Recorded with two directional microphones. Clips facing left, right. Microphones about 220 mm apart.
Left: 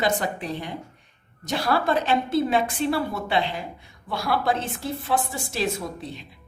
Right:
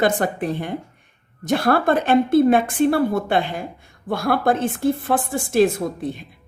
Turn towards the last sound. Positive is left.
turn(degrees=-50)  # may be behind; listen again after turning